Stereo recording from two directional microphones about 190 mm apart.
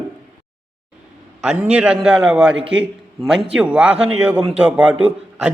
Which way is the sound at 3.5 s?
5° right (ahead or behind).